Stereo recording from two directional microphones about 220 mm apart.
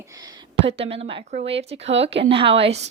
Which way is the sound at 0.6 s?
25° right (ahead or behind).